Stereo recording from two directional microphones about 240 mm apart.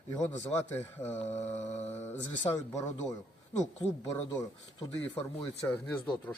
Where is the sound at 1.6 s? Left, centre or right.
Left.